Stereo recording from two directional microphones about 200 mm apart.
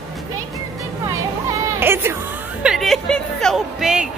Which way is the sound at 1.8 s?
10° right (ahead or behind).